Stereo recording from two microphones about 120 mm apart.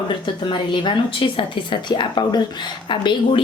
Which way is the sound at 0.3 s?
40° left (ahead or behind).